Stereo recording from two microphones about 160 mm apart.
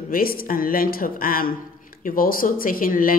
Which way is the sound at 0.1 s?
65° left (ahead or behind).